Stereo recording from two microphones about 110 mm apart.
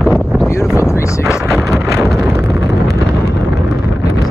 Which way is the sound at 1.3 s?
Centre (ahead or behind).